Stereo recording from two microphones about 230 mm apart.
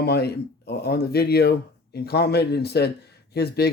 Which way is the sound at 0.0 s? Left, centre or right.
Left.